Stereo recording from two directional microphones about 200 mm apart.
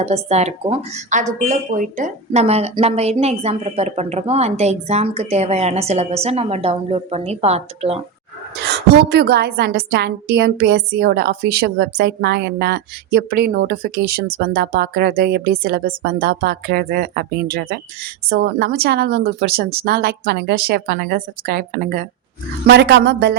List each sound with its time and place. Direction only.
0.0 s speech: 35° right (ahead or behind)
8.5 s a woman's voice: 55° right (ahead or behind)